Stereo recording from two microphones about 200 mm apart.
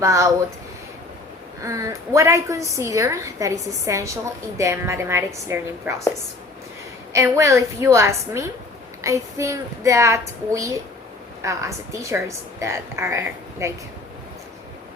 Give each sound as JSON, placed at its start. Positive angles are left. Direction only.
{"t": 0.0, "sound": "a woman's voice", "side_deg": -15}
{"t": 1.6, "sound": "a woman's voice", "side_deg": -15}
{"t": 7.1, "sound": "a woman's voice", "side_deg": -15}